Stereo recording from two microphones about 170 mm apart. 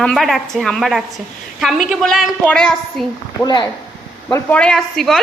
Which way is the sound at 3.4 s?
25° left (ahead or behind).